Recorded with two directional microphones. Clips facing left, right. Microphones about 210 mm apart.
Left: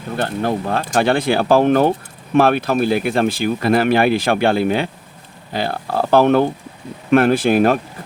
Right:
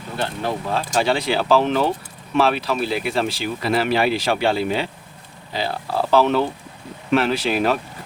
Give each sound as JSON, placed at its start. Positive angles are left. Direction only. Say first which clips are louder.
{"t": 0.2, "sound": "speech", "louder": "left 4 dB", "side_deg": 55}